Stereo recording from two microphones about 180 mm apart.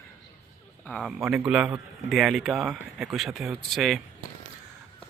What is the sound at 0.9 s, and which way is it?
Speech, centre (ahead or behind).